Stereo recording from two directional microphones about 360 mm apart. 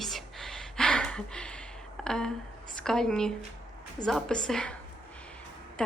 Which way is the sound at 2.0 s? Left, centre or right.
Centre.